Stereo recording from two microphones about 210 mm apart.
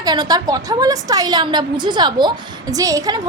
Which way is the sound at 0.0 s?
20° right (ahead or behind).